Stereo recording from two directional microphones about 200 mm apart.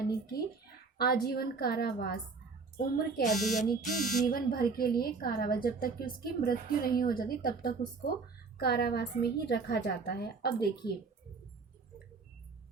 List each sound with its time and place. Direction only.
0.9 s speech: 50° left (ahead or behind)
3.4 s speech: 40° left (ahead or behind)